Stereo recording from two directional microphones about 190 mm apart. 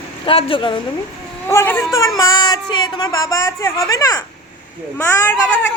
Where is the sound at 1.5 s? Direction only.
15° left (ahead or behind).